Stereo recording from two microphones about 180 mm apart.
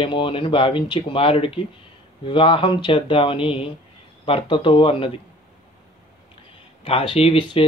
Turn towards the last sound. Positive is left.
turn(degrees=30)  # may be behind; listen again after turning